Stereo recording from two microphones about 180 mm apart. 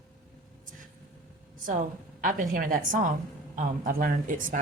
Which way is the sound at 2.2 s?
50° right (ahead or behind).